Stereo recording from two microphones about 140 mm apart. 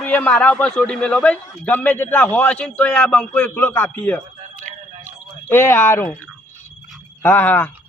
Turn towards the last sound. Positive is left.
turn(degrees=15)  # may be behind; listen again after turning